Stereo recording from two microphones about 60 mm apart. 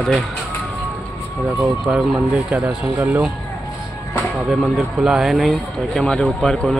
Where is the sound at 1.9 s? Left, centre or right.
Right.